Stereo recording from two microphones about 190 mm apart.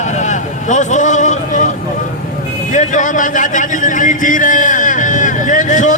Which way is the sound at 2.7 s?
40° left (ahead or behind).